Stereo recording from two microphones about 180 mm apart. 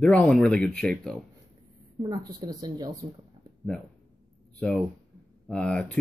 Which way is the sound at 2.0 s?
20° right (ahead or behind).